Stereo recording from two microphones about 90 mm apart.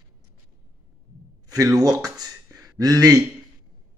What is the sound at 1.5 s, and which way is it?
Speech, 40° right (ahead or behind).